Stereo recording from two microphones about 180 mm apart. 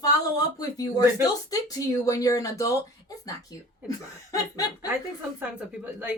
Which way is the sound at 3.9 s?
20° left (ahead or behind).